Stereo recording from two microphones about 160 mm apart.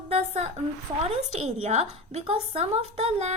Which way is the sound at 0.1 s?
45° right (ahead or behind).